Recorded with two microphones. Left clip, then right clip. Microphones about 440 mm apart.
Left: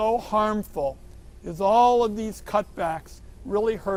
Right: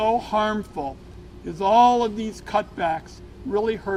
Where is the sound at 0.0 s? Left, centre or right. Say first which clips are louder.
Right 1 dB; left.